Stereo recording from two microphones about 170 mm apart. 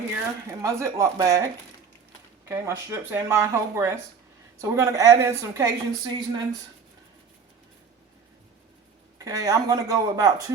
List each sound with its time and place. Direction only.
0.6 s speech: 15° right (ahead or behind)
2.5 s a woman's voice: 15° right (ahead or behind)
9.1 s a woman's voice: 20° right (ahead or behind)